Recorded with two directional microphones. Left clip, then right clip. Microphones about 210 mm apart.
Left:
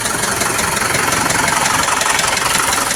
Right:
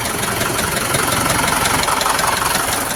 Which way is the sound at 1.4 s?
50° right (ahead or behind).